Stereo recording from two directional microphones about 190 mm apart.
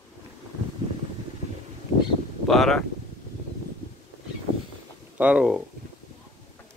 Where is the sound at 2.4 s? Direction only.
Centre (ahead or behind).